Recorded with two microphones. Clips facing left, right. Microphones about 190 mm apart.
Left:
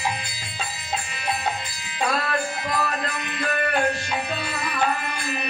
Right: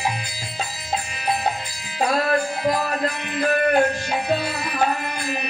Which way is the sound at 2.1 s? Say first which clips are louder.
Right 5 dB; 35° right (ahead or behind).